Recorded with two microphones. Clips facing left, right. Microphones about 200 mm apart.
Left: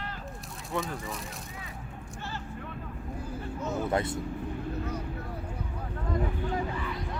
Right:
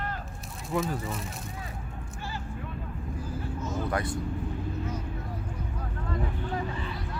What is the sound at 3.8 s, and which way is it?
Speech, 25° left (ahead or behind).